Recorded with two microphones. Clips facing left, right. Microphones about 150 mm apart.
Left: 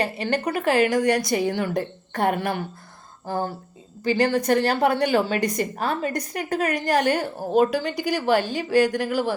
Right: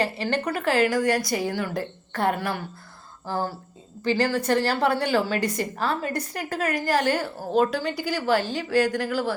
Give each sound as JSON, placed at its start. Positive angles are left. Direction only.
{"t": 0.0, "sound": "a woman's voice", "side_deg": 10}
{"t": 4.0, "sound": "a woman's voice", "side_deg": 15}